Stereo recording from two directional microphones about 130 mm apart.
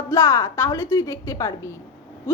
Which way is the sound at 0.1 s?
25° left (ahead or behind).